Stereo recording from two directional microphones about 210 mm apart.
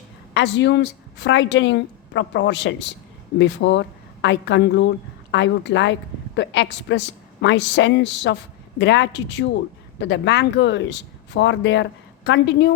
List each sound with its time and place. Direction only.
0.3 s a woman's voice: 55° left (ahead or behind)